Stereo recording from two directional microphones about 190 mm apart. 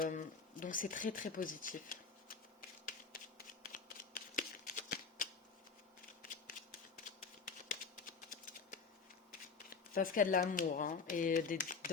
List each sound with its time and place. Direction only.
0.0 s a sound: 45° left (ahead or behind)
7.4 s typewriter: 45° left (ahead or behind)
9.6 s speech: 50° left (ahead or behind)